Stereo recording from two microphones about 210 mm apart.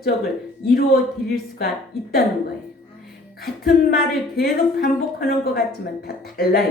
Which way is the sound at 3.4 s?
45° left (ahead or behind).